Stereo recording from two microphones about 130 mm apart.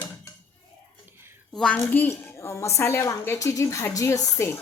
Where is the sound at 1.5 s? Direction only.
5° left (ahead or behind).